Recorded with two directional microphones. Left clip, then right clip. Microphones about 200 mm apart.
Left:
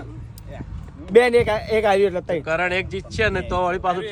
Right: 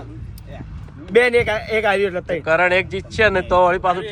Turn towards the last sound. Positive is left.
turn(degrees=15)  # may be behind; listen again after turning